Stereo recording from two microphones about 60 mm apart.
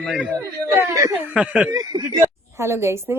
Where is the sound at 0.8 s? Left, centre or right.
Right.